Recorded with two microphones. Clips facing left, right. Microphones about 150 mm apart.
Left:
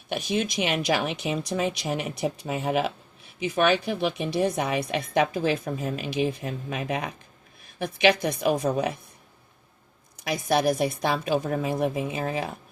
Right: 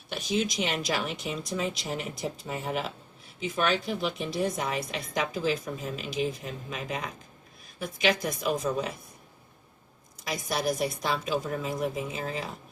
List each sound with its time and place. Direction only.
0.1 s a woman's voice: 60° left (ahead or behind)
10.2 s a woman's voice: 65° left (ahead or behind)